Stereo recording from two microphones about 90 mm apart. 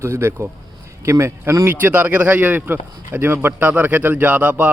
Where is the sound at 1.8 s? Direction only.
20° right (ahead or behind).